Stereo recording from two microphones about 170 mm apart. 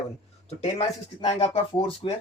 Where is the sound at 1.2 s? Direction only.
35° left (ahead or behind).